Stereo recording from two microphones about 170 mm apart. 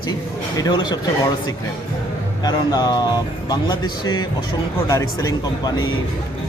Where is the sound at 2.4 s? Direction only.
25° left (ahead or behind).